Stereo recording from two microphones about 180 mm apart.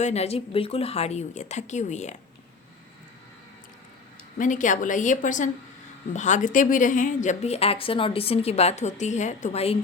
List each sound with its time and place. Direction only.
0.0 s a woman's voice: 35° left (ahead or behind)
4.4 s a woman's voice: 45° left (ahead or behind)